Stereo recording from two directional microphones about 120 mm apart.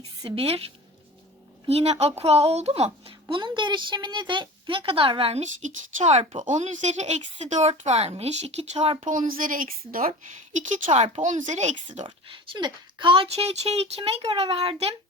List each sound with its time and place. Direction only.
0.3 s a woman's voice: 55° right (ahead or behind)
5.4 s speech: 75° right (ahead or behind)
6.4 s speech: 85° right
12.0 s a woman's voice: 45° right (ahead or behind)